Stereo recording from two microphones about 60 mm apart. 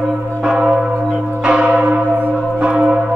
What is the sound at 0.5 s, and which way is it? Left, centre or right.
Church bell, centre.